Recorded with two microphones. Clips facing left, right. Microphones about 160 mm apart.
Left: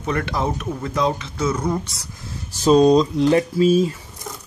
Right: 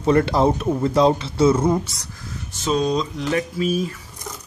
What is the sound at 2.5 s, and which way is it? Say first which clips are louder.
Speech: left 8 dB; 35° left (ahead or behind).